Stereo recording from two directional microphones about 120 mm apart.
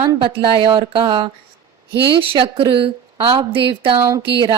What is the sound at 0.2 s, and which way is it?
A woman's voice, 45° right (ahead or behind).